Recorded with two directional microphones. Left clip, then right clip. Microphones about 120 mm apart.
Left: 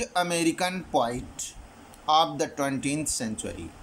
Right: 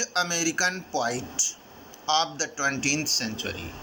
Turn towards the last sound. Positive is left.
turn(degrees=50)  # may be behind; listen again after turning